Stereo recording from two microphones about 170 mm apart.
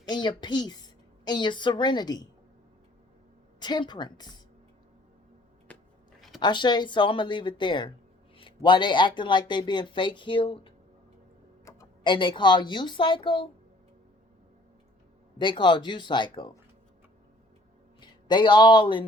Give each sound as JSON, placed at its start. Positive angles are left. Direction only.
{"t": 0.1, "sound": "a woman's voice", "side_deg": 25}
{"t": 3.6, "sound": "speech", "side_deg": 25}
{"t": 5.7, "sound": "a sound", "side_deg": 10}
{"t": 6.4, "sound": "speech", "side_deg": 25}
{"t": 11.6, "sound": "a sound", "side_deg": 20}
{"t": 12.1, "sound": "speech", "side_deg": 30}
{"t": 15.4, "sound": "speech", "side_deg": 25}
{"t": 18.0, "sound": "speech", "side_deg": 25}